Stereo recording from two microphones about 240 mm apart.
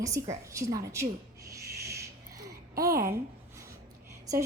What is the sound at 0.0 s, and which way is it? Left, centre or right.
A woman's voice, centre.